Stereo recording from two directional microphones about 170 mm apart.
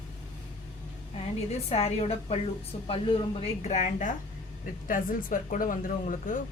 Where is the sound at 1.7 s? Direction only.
35° left (ahead or behind).